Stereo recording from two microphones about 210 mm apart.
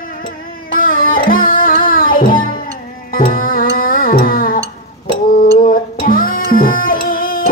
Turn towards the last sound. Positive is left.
turn(degrees=45)  # may be behind; listen again after turning